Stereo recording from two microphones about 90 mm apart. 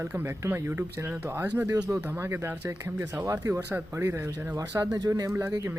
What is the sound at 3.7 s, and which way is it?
A man's voice, 25° right (ahead or behind).